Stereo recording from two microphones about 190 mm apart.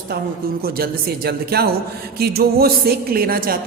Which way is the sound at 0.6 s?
55° right (ahead or behind).